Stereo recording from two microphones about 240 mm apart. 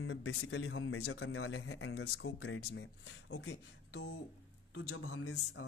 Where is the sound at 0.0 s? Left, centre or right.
Left.